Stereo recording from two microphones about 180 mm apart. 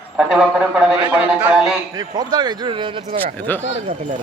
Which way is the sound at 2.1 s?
25° right (ahead or behind).